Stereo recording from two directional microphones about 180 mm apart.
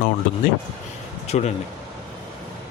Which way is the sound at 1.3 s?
35° left (ahead or behind).